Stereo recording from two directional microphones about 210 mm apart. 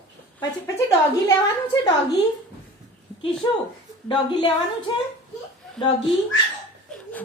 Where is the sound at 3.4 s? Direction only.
20° left (ahead or behind).